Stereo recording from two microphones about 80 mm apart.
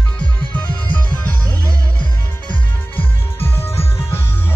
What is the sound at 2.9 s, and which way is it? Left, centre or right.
Music, left.